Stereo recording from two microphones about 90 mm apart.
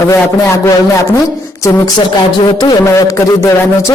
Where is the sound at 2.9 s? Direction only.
35° left (ahead or behind).